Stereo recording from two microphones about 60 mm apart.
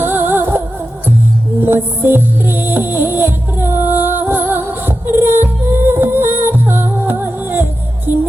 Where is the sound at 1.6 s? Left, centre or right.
Right.